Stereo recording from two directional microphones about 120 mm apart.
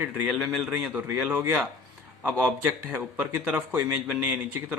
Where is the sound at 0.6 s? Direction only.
10° right (ahead or behind).